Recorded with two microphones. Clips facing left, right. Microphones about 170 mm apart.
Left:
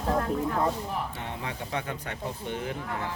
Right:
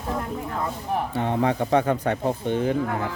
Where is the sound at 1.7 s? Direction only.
40° right (ahead or behind).